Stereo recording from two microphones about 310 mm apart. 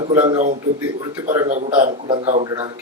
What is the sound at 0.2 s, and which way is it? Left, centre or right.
A man's voice, right.